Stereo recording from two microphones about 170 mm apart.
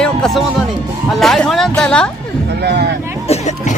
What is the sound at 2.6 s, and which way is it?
Speech, 70° right (ahead or behind).